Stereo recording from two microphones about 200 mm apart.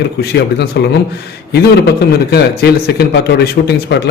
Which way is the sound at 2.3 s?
55° left (ahead or behind).